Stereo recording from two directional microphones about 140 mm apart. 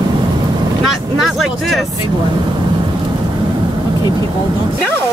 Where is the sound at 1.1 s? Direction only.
Centre (ahead or behind).